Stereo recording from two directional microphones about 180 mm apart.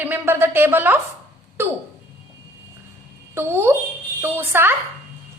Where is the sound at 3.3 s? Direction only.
10° right (ahead or behind).